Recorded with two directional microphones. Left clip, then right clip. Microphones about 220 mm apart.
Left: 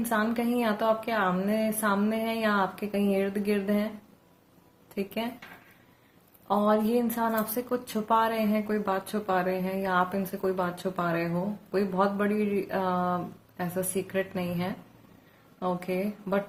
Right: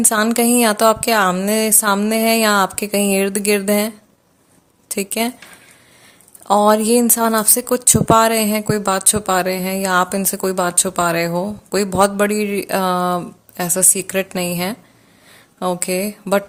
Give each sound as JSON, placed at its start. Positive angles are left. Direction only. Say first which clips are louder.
{"t": 0.1, "sound": "speech", "louder": "right 9 dB", "side_deg": -50}
{"t": 4.9, "sound": "speech", "louder": "right 12 dB", "side_deg": -50}
{"t": 6.5, "sound": "speech", "louder": "right 12 dB", "side_deg": -55}